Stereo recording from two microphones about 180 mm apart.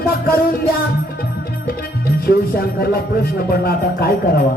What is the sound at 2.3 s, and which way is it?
Music, 60° left (ahead or behind).